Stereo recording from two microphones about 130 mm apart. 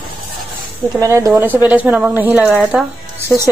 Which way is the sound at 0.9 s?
25° right (ahead or behind).